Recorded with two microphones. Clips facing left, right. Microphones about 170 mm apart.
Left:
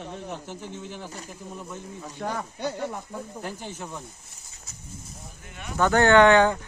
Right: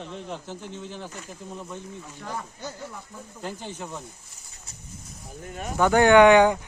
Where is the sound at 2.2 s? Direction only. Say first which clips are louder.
Left 6 dB; 70° left (ahead or behind).